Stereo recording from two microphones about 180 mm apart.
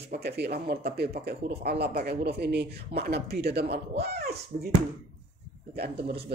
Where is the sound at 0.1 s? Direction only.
65° right (ahead or behind).